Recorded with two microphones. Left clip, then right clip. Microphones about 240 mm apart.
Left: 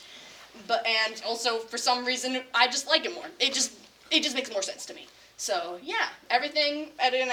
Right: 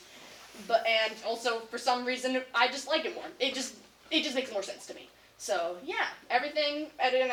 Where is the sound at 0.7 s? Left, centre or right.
Left.